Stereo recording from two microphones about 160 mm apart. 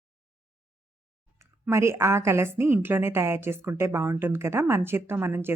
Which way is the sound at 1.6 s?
15° right (ahead or behind).